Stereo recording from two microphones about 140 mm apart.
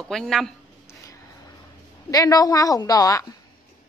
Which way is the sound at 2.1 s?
25° left (ahead or behind).